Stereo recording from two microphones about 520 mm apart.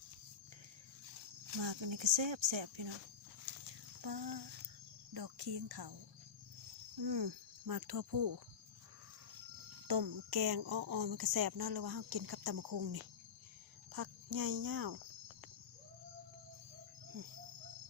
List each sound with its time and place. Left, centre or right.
1.6 s speech: right
3.7 s a sound: right
5.1 s speech: right
7.0 s speech: right
9.8 s speech: right